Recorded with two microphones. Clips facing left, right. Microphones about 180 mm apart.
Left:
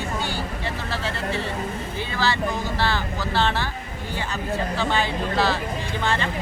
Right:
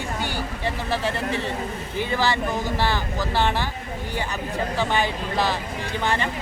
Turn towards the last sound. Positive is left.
turn(degrees=-15)  # may be behind; listen again after turning